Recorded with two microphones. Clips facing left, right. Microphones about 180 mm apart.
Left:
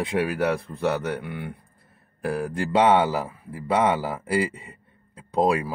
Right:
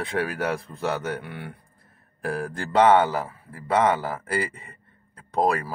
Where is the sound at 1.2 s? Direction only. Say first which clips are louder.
Left 4 dB; centre (ahead or behind).